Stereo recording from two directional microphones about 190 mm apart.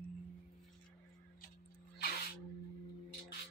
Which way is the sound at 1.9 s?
55° left (ahead or behind).